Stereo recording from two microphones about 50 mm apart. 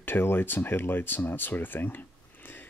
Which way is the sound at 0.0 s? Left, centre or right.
Left.